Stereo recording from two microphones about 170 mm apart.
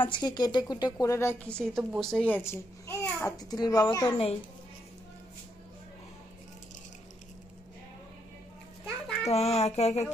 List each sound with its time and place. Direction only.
0.0 s a woman's voice: 25° left (ahead or behind)
1.6 s a child's voice: centre (ahead or behind); by 4.3 s 25° left (ahead or behind)
9.3 s a child's voice: 40° left (ahead or behind)